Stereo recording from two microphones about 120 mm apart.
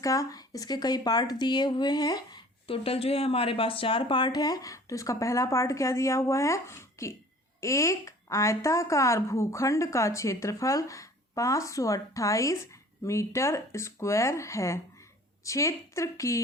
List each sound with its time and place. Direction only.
0.0 s speech: 30° left (ahead or behind)
2.6 s a woman's voice: 55° left (ahead or behind); by 16.4 s 25° left (ahead or behind)